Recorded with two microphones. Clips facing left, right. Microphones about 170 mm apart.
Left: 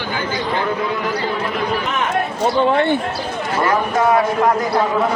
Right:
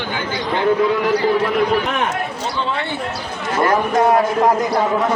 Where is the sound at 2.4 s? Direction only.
55° left (ahead or behind).